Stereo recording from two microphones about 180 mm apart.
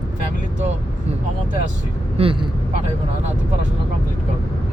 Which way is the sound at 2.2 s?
30° right (ahead or behind).